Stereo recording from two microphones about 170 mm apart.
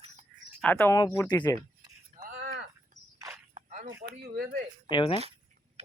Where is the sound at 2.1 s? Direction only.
55° right (ahead or behind).